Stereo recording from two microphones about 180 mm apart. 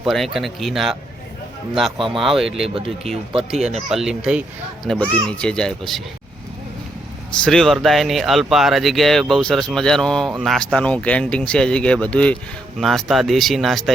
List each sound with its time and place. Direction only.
0.0 s speech: centre (ahead or behind)
2.6 s speech: 35° right (ahead or behind)
3.8 s speech: centre (ahead or behind)
7.4 s speech: 5° left (ahead or behind)